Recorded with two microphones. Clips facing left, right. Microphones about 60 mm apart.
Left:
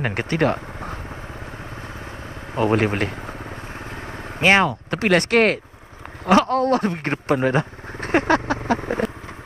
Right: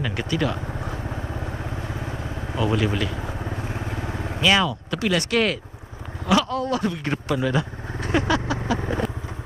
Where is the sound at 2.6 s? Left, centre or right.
Left.